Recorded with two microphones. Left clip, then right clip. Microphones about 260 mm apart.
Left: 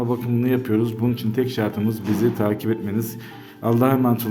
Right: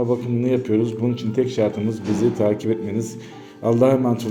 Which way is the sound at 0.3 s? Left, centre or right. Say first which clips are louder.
Even; centre.